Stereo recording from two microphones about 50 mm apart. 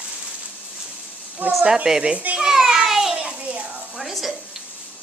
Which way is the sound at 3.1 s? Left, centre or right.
Right.